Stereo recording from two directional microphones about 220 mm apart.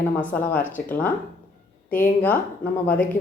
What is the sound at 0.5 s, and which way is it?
A woman's voice, 10° left (ahead or behind).